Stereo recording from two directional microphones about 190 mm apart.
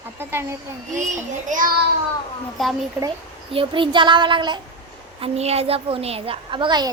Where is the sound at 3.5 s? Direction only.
25° right (ahead or behind).